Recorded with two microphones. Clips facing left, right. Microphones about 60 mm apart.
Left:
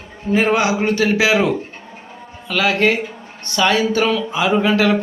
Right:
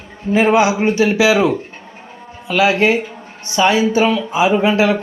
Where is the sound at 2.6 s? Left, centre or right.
Right.